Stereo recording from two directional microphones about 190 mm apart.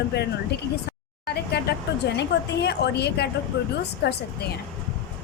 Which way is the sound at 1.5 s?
60° left (ahead or behind).